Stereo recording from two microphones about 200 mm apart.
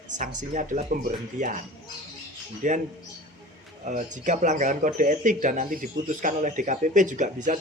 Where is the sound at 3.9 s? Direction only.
40° right (ahead or behind).